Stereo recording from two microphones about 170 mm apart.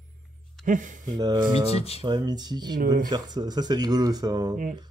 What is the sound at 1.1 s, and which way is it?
Speech, 25° right (ahead or behind).